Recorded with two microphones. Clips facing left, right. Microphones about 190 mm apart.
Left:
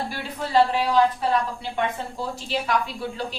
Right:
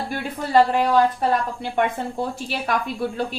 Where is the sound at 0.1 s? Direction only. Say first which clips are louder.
Right 6 dB; 50° right (ahead or behind).